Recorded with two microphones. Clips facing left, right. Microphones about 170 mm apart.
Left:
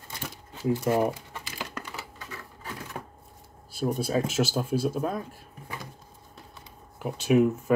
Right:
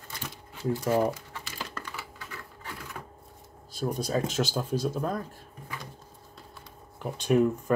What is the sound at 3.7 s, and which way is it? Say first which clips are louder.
Speech: left 2 dB; 5° left (ahead or behind).